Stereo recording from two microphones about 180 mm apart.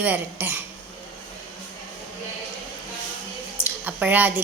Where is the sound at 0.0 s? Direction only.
10° right (ahead or behind).